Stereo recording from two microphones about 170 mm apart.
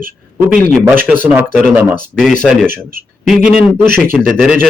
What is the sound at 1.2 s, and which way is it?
Speech, 10° right (ahead or behind).